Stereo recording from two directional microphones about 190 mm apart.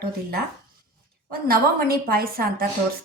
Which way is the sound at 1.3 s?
50° right (ahead or behind).